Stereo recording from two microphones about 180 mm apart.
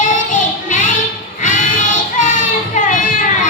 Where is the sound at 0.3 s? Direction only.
45° left (ahead or behind).